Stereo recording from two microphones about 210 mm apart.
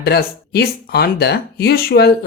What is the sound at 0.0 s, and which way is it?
Speech, 50° left (ahead or behind).